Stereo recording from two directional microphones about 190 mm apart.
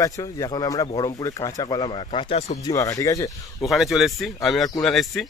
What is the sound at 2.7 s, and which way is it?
Speech, 15° left (ahead or behind).